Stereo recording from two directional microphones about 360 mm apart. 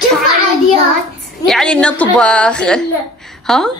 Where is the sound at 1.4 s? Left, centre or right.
Centre.